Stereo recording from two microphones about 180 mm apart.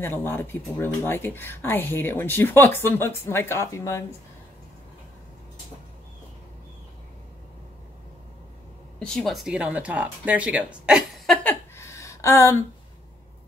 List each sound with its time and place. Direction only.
0.0 s speech: 10° left (ahead or behind)
9.0 s speech: centre (ahead or behind)
11.4 s a sound: 15° left (ahead or behind)